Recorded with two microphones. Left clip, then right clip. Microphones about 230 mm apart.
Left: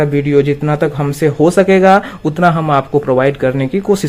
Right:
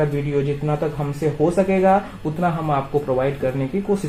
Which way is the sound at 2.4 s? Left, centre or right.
Left.